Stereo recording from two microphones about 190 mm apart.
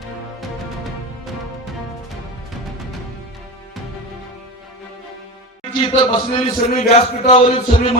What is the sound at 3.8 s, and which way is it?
Music, centre (ahead or behind).